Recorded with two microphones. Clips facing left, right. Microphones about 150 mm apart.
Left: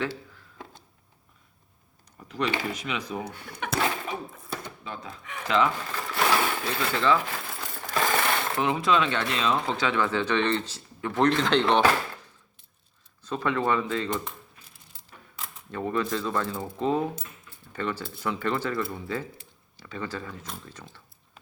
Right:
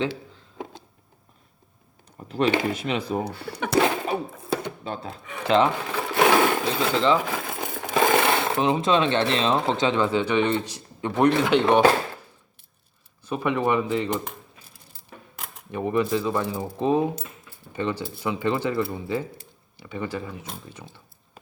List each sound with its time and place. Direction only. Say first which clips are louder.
2.1 s a sound: right 7 dB; 35° right (ahead or behind)
2.7 s speech: right 6 dB; 30° right (ahead or behind)
4.1 s a sound: right 8 dB; 75° right (ahead or behind)
4.8 s speech: right 6 dB; 35° right (ahead or behind)
5.8 s sewing machine: right 7 dB; 70° right (ahead or behind)
6.7 s speech: right 1 dB; 20° right (ahead or behind)
7.4 s coin: right 7 dB; 55° right (ahead or behind); by 8.5 s 80° right
8.5 s speech: right 1 dB; 20° right (ahead or behind)
13.2 s speech: right 3 dB; 15° right (ahead or behind)
15.7 s speech: right 5 dB; 15° right (ahead or behind)
18.3 s speech: right 3 dB; 15° right (ahead or behind)